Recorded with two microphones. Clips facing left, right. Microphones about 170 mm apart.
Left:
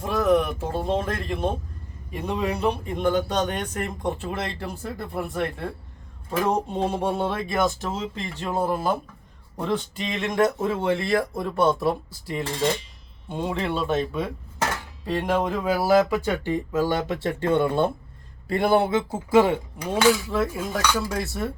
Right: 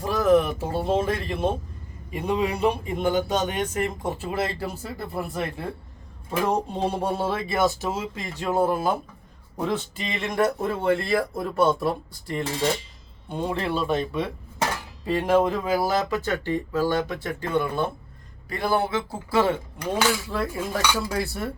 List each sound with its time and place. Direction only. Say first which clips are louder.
0.0 s a man's voice: right 1 dB; centre (ahead or behind); by 19.5 s 15° left (ahead or behind)
19.8 s speech: left 4 dB; 5° left (ahead or behind)